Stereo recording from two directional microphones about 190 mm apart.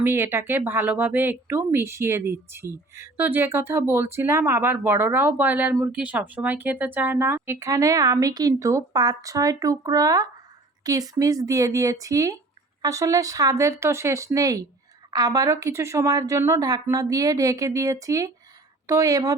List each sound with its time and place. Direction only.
0.0 s speech: 10° right (ahead or behind)